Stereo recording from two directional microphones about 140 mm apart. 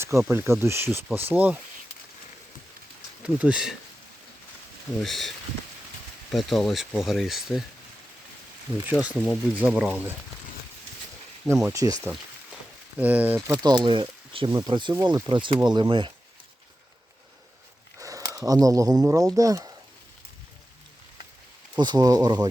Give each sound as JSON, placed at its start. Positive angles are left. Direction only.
{"t": 0.0, "sound": "speech", "side_deg": -20}
{"t": 3.2, "sound": "speech", "side_deg": -10}
{"t": 4.9, "sound": "speech", "side_deg": 0}
{"t": 6.3, "sound": "speech", "side_deg": 0}
{"t": 8.9, "sound": "speech", "side_deg": -10}
{"t": 11.7, "sound": "speech", "side_deg": -25}
{"t": 13.0, "sound": "speech", "side_deg": -10}
{"t": 13.6, "sound": "speech", "side_deg": -30}
{"t": 18.0, "sound": "speech", "side_deg": -25}
{"t": 21.8, "sound": "speech", "side_deg": -30}